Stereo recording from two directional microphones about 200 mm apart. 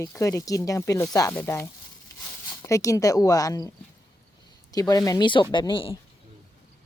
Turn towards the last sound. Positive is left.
turn(degrees=25)  # may be behind; listen again after turning